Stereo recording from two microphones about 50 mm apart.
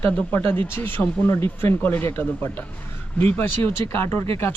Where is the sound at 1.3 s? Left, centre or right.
Left.